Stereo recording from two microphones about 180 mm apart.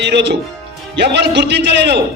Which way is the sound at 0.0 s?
75° right (ahead or behind).